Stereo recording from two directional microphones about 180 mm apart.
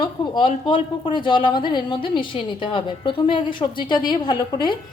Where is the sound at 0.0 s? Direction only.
25° left (ahead or behind).